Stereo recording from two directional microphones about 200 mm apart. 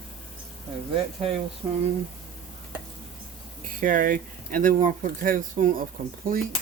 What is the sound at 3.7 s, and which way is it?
Speech, 40° right (ahead or behind).